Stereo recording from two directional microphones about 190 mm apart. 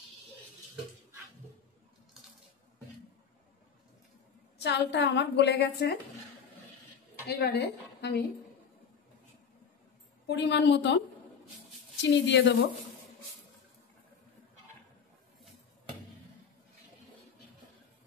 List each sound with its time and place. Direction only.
4.6 s a woman's voice: 60° left (ahead or behind)
7.2 s a woman's voice: 60° left (ahead or behind)
10.2 s a woman's voice: 65° left (ahead or behind)
12.0 s speech: 70° left (ahead or behind)